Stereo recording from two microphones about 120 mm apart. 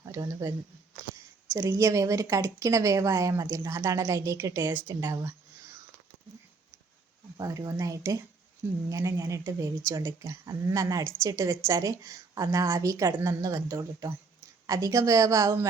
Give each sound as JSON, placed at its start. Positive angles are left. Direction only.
{"t": 0.0, "sound": "speech", "side_deg": -25}
{"t": 1.5, "sound": "a woman's voice", "side_deg": -25}
{"t": 7.3, "sound": "a woman's voice", "side_deg": -30}